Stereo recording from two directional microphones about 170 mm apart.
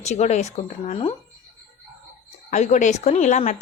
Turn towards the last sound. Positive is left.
turn(degrees=45)  # may be behind; listen again after turning